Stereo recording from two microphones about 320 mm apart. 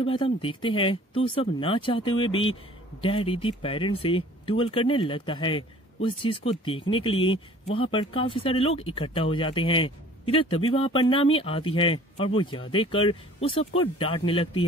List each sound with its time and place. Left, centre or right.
0.0 s speech: centre